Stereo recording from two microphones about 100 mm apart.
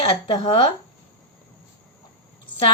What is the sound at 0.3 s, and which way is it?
Speech, 65° left (ahead or behind).